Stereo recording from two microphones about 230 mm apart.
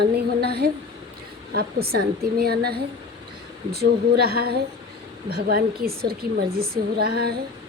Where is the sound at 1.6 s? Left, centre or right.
Right.